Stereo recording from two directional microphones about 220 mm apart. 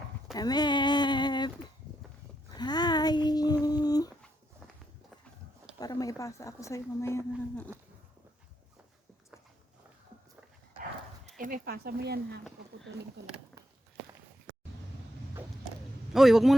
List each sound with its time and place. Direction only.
0.3 s a sound: 20° left (ahead or behind)
2.6 s child singing: 20° left (ahead or behind)
5.8 s a woman's voice: 15° left (ahead or behind)
11.3 s speech: 40° right (ahead or behind)
12.5 s speech: centre (ahead or behind)
16.1 s a man's voice: centre (ahead or behind)